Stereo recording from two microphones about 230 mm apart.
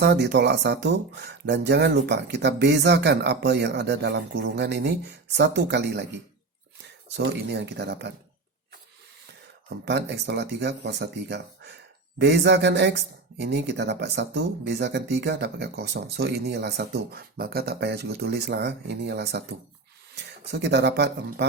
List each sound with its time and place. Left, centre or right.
0.0 s speech: right
9.6 s speech: right